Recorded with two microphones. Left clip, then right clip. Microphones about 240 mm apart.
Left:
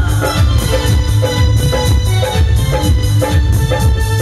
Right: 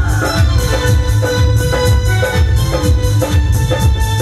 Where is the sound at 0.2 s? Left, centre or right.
Left.